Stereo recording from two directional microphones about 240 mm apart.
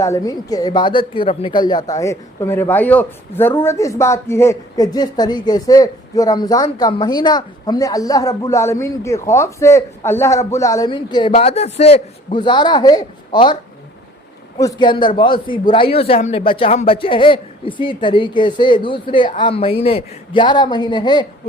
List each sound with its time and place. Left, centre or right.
0.0 s speech: centre
14.6 s a man's voice: centre